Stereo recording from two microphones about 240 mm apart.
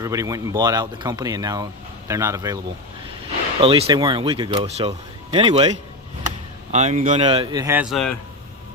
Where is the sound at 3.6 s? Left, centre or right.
Right; by 8.1 s centre.